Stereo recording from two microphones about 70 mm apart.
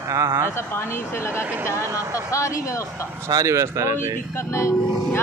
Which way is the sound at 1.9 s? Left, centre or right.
Left.